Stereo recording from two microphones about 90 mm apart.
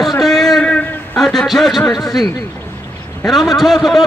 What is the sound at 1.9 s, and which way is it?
Speech, 45° left (ahead or behind).